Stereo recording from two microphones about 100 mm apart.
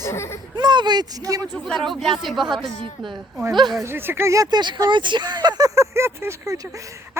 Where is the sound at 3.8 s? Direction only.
25° right (ahead or behind).